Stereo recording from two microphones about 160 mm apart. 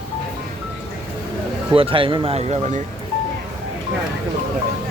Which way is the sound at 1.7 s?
35° right (ahead or behind).